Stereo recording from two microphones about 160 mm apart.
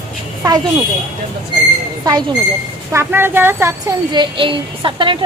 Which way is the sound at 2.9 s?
15° right (ahead or behind).